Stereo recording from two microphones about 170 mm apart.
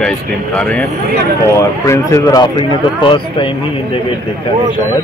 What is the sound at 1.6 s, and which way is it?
Speech, 20° left (ahead or behind).